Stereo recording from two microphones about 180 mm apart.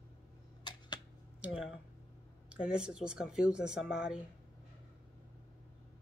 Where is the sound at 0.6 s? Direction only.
25° left (ahead or behind).